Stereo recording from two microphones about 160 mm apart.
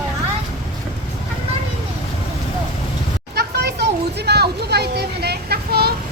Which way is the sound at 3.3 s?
90° right.